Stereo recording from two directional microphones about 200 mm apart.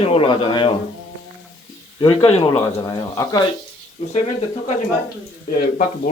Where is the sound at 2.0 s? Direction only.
25° left (ahead or behind).